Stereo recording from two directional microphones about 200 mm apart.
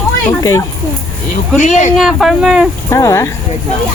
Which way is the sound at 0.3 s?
15° left (ahead or behind).